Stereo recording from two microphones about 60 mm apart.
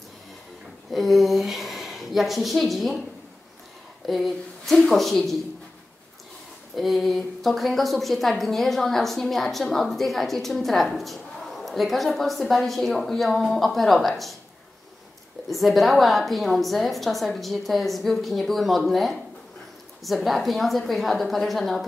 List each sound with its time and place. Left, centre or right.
0.9 s a woman's voice: centre
4.0 s a woman's voice: centre
6.7 s a woman's voice: centre
15.5 s a woman's voice: centre